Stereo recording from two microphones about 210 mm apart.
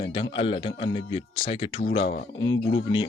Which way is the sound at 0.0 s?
25° left (ahead or behind).